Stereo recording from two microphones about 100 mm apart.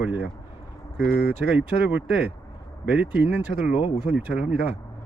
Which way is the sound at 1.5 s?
10° right (ahead or behind).